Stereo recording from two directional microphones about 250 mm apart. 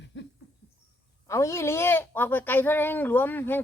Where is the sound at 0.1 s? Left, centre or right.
Left.